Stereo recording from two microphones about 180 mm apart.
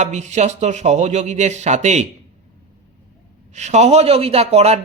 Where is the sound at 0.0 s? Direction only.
40° right (ahead or behind).